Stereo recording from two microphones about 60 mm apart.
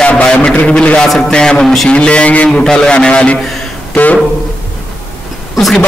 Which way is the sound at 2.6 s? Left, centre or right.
Centre.